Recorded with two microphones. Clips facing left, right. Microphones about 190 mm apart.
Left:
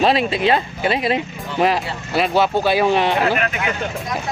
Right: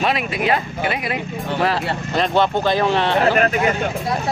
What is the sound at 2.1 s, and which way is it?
Speech, 5° left (ahead or behind).